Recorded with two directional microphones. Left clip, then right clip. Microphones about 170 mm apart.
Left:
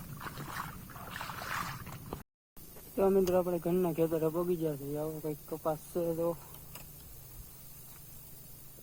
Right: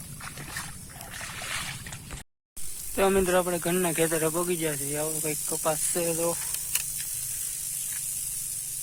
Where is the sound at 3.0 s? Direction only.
40° right (ahead or behind).